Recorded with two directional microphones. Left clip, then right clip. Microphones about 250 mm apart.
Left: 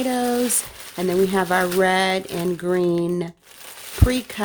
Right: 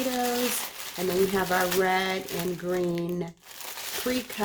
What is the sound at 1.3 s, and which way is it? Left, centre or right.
Speech, left.